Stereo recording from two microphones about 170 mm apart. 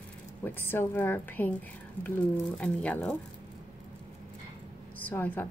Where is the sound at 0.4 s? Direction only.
15° left (ahead or behind).